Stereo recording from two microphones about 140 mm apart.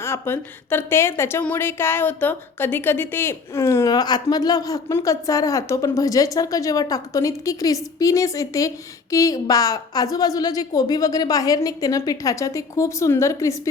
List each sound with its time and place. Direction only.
0.0 s a woman's voice: 15° left (ahead or behind)